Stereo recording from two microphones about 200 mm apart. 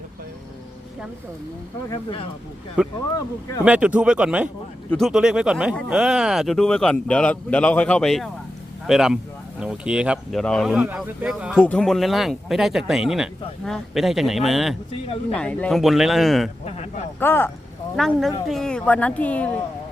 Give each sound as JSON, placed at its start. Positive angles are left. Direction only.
{"t": 1.9, "sound": "speech", "side_deg": 25}
{"t": 2.8, "sound": "speech", "side_deg": -5}
{"t": 11.5, "sound": "speech", "side_deg": 5}
{"t": 14.9, "sound": "speech", "side_deg": 30}
{"t": 15.4, "sound": "speech", "side_deg": 5}
{"t": 16.6, "sound": "speech", "side_deg": 35}
{"t": 17.2, "sound": "speech", "side_deg": 10}